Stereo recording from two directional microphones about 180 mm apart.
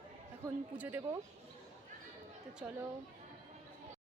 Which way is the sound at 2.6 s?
5° right (ahead or behind).